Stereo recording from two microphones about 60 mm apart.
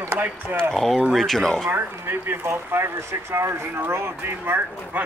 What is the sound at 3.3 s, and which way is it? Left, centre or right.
Speech, right.